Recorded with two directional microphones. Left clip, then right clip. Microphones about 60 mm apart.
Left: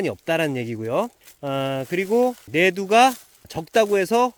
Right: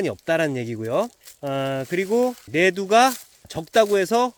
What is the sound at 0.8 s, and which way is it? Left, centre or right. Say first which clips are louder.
Speech: right 1 dB; left.